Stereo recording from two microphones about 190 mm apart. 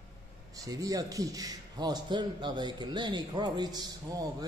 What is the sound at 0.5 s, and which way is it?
A man's voice, 20° right (ahead or behind).